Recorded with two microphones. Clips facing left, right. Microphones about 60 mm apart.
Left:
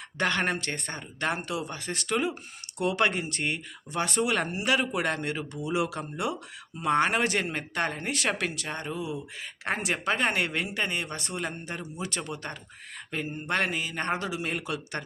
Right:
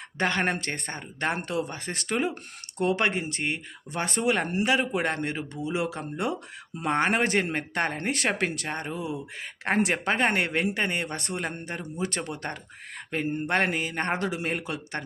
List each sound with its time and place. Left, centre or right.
0.2 s speech: right
3.9 s speech: right
14.5 s speech: right